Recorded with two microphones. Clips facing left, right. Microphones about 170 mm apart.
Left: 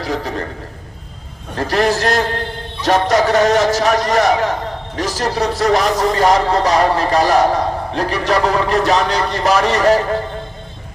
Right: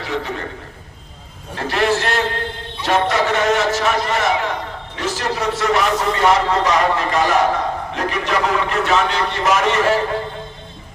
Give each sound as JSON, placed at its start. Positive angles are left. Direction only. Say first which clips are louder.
{"t": 0.0, "sound": "a man's voice", "louder": "left 3 dB", "side_deg": 40}
{"t": 1.5, "sound": "speech", "louder": "left 2 dB", "side_deg": 40}